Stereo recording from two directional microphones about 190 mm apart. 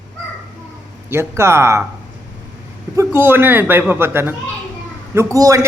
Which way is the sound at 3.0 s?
10° right (ahead or behind).